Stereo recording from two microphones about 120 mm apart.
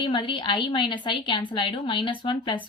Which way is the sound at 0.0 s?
40° left (ahead or behind).